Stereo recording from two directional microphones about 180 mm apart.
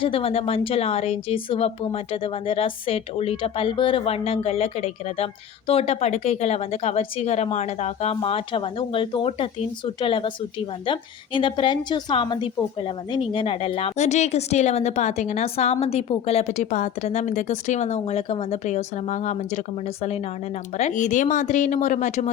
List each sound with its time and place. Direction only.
0.0 s a woman's voice: 30° left (ahead or behind)
11.3 s a woman's voice: 30° left (ahead or behind)
20.7 s speech: 40° left (ahead or behind)